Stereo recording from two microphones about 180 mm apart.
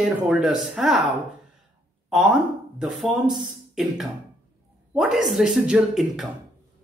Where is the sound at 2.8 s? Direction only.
Centre (ahead or behind).